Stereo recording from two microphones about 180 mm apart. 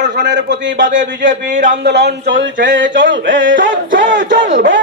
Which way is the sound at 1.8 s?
70° right (ahead or behind).